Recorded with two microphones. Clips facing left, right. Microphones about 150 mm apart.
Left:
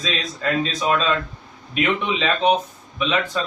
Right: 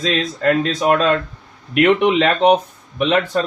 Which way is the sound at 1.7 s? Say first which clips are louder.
Right 9 dB; 70° right (ahead or behind).